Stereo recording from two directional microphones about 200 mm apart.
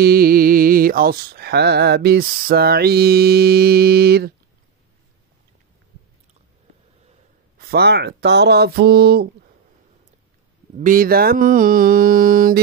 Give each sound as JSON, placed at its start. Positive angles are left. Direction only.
{"t": 0.0, "sound": "speech", "side_deg": -50}
{"t": 7.5, "sound": "speech", "side_deg": -50}
{"t": 10.8, "sound": "speech", "side_deg": -45}